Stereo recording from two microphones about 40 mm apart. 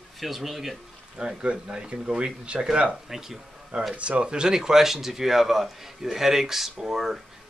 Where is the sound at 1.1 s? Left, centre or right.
Right.